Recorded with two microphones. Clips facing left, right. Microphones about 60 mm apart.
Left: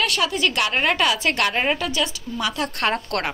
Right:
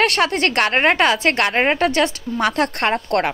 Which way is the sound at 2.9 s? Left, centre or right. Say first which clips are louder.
Right 5 dB; right.